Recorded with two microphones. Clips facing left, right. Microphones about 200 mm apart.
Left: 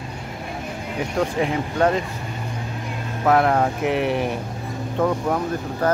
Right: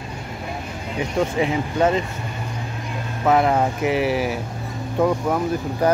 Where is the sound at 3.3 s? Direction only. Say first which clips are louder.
Even; centre (ahead or behind).